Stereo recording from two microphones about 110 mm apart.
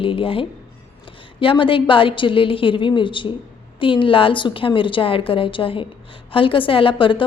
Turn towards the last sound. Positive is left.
turn(degrees=50)  # may be behind; listen again after turning